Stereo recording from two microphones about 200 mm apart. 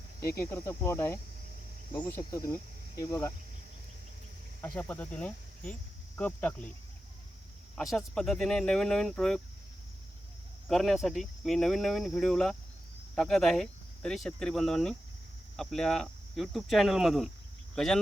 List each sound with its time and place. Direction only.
0.2 s speech: 15° left (ahead or behind)
4.6 s speech: 10° left (ahead or behind)
7.8 s speech: centre (ahead or behind)
10.7 s speech: centre (ahead or behind)